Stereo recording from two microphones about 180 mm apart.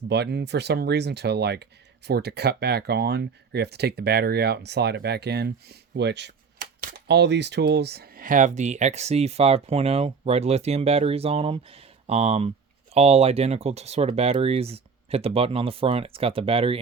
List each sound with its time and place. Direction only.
0.1 s speech: 65° right (ahead or behind); by 16.7 s 30° right (ahead or behind)